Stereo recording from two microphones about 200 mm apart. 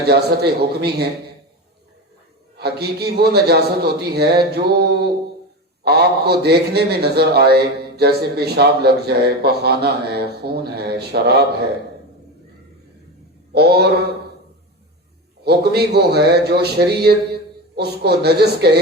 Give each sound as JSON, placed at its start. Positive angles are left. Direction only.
{"t": 0.0, "sound": "a man's voice", "side_deg": -55}
{"t": 2.6, "sound": "a man's voice", "side_deg": -55}
{"t": 13.5, "sound": "a man's voice", "side_deg": -55}
{"t": 15.4, "sound": "a man's voice", "side_deg": -55}